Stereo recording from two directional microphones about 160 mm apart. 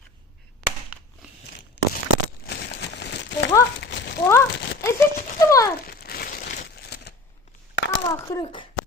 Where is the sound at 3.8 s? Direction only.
90° left.